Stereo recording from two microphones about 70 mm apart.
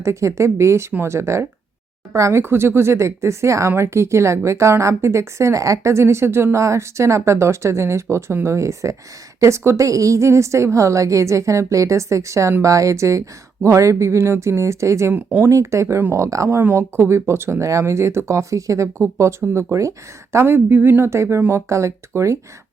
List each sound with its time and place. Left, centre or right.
0.0 s speech: right
2.4 s speech: right